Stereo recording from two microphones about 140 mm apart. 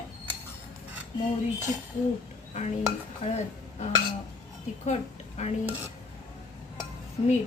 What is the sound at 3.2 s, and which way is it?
Speech, 45° left (ahead or behind).